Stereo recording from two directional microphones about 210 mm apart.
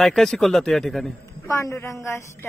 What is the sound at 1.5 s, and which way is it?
Speech, 15° left (ahead or behind).